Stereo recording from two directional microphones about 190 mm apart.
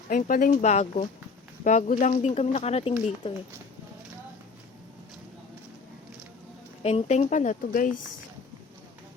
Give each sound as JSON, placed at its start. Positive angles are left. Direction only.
{"t": 0.1, "sound": "speech", "side_deg": 45}
{"t": 6.8, "sound": "speech", "side_deg": 35}